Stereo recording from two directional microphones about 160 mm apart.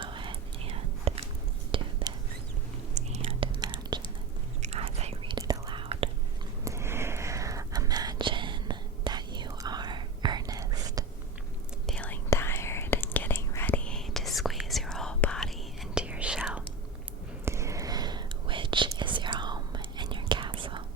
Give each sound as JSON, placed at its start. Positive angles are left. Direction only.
{"t": 0.0, "sound": "whispering", "side_deg": -30}
{"t": 2.9, "sound": "whispering", "side_deg": -40}
{"t": 4.6, "sound": "whispering", "side_deg": -40}
{"t": 6.7, "sound": "whispering", "side_deg": -15}
{"t": 11.9, "sound": "whispering", "side_deg": 10}
{"t": 17.4, "sound": "whispering", "side_deg": -15}